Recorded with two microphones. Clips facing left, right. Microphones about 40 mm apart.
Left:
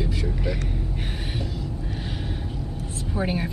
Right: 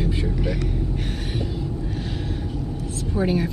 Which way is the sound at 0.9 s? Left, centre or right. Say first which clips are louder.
Right 3 dB; centre.